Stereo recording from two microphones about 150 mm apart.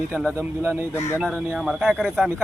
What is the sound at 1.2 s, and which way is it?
A man's voice, 5° left (ahead or behind).